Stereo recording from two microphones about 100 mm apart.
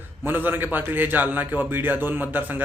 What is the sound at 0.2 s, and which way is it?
A man's voice, 20° right (ahead or behind).